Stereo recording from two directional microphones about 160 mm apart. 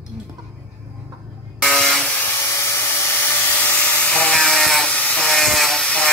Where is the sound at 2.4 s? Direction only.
15° left (ahead or behind).